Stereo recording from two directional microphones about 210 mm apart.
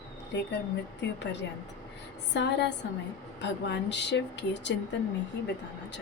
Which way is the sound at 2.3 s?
55° left (ahead or behind).